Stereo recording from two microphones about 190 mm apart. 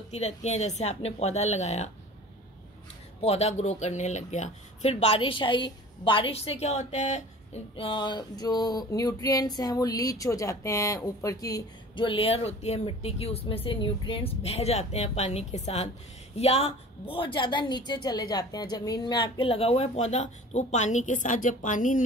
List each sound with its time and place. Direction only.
0.1 s speech: 35° left (ahead or behind)
3.2 s a woman's voice: 35° left (ahead or behind)